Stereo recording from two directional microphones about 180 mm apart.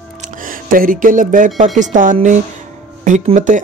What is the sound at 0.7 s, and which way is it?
Speech, 50° right (ahead or behind).